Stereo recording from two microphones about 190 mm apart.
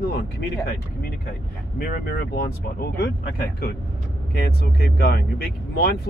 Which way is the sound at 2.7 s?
55° left (ahead or behind).